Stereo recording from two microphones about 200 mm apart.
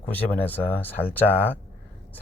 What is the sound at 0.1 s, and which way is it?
Speech, 10° left (ahead or behind).